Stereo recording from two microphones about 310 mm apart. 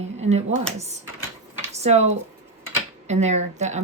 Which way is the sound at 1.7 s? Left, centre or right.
Right.